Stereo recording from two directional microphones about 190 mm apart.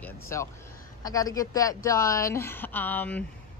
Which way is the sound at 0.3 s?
15° left (ahead or behind).